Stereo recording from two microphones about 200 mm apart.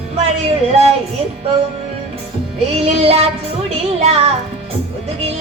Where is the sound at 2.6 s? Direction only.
30° right (ahead or behind).